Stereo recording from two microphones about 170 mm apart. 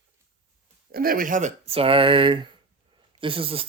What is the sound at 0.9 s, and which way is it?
Speech, 60° right (ahead or behind).